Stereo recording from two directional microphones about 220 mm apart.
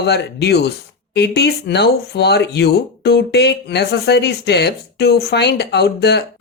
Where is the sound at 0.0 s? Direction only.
50° left (ahead or behind).